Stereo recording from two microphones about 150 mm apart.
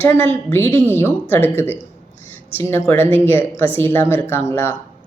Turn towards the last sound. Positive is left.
turn(degrees=15)  # may be behind; listen again after turning